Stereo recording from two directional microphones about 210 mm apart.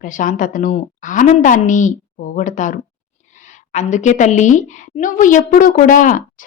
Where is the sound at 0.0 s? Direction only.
40° left (ahead or behind).